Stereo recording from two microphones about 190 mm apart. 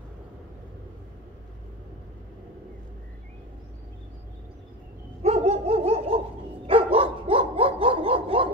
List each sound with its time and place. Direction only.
5.2 s dog: 35° right (ahead or behind)